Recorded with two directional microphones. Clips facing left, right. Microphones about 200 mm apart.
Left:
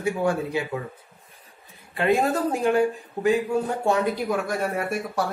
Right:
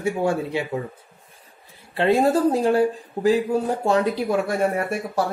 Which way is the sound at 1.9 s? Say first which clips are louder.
Right 3 dB; 30° right (ahead or behind).